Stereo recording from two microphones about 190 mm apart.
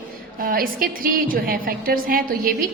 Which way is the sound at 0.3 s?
50° right (ahead or behind).